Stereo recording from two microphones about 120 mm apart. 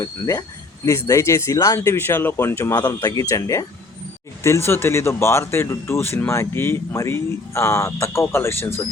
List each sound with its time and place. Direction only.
0.0 s speech: 25° left (ahead or behind)